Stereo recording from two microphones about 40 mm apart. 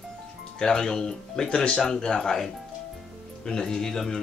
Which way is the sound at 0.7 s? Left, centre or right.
Centre.